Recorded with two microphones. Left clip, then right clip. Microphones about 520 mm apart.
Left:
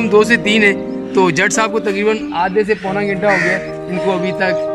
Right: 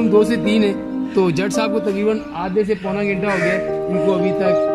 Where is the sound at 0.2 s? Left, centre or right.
Centre.